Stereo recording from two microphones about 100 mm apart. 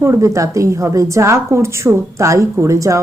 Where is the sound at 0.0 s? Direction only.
30° right (ahead or behind).